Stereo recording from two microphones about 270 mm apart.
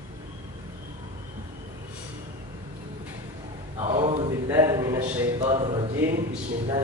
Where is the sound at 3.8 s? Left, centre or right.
Centre.